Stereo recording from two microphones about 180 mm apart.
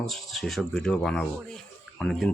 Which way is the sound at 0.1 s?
Centre (ahead or behind).